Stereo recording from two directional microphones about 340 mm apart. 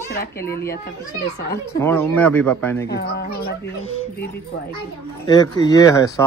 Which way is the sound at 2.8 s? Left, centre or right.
Left.